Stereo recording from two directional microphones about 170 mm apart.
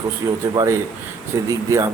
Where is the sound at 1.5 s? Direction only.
20° right (ahead or behind).